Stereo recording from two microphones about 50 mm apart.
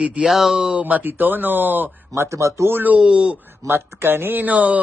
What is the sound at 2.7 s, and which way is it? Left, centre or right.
Speech, right.